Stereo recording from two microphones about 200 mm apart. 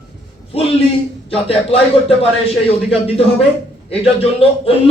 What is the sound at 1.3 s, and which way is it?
A man's voice, 30° left (ahead or behind).